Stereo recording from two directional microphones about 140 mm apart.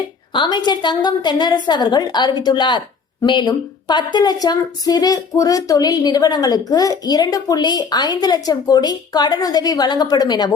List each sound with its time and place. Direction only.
0.3 s a woman's voice: 35° left (ahead or behind)